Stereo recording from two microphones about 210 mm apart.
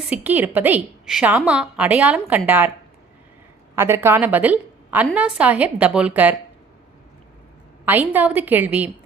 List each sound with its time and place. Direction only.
0.1 s a woman's voice: 5° right (ahead or behind)
3.8 s a woman's voice: 10° right (ahead or behind)
7.9 s a woman's voice: 10° right (ahead or behind)